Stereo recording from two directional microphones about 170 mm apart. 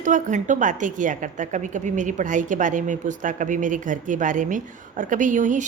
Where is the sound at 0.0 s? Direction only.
45° right (ahead or behind).